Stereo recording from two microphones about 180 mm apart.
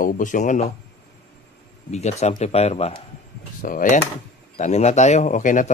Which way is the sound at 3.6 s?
50° left (ahead or behind).